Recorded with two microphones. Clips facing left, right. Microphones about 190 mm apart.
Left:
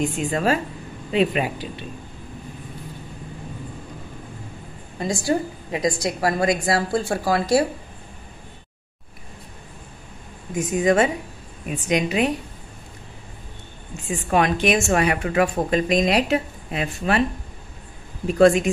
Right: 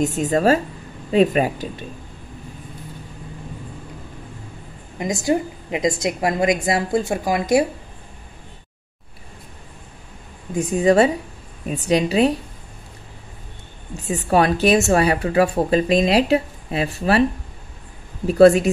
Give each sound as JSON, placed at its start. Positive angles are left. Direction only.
{"t": 0.0, "sound": "speech", "side_deg": -40}
{"t": 4.9, "sound": "a woman's voice", "side_deg": -20}
{"t": 10.5, "sound": "speech", "side_deg": -35}
{"t": 13.9, "sound": "speech", "side_deg": -40}
{"t": 18.2, "sound": "speech", "side_deg": -35}